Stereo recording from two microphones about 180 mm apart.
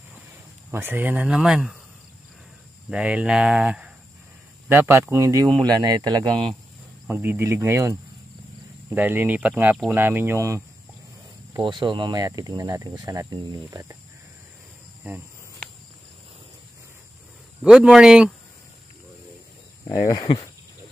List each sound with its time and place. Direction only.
0.7 s speech: 10° right (ahead or behind)
2.9 s speech: 5° right (ahead or behind); by 6.3 s 20° right (ahead or behind)
7.1 s speech: 10° right (ahead or behind)
17.6 s speech: 5° right (ahead or behind)
19.9 s speech: 20° left (ahead or behind)